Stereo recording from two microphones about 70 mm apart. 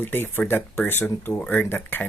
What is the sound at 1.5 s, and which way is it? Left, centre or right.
Speech, left.